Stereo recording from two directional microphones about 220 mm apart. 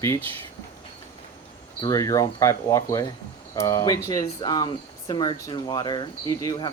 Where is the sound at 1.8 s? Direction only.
15° left (ahead or behind).